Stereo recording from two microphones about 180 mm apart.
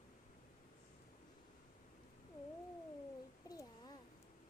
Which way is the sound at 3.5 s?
20° left (ahead or behind).